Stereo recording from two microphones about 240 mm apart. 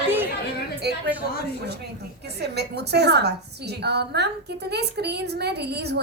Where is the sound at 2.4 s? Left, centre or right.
Right.